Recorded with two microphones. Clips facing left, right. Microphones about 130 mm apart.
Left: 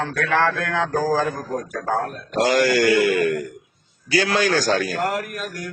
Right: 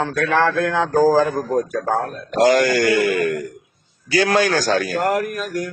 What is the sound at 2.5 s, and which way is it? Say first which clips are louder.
Speech: right 1 dB; 50° right (ahead or behind).